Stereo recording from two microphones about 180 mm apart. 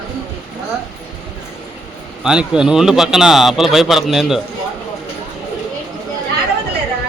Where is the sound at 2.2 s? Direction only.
5° right (ahead or behind).